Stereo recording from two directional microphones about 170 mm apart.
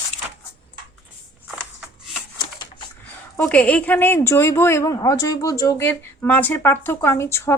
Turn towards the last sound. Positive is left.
turn(degrees=15)  # may be behind; listen again after turning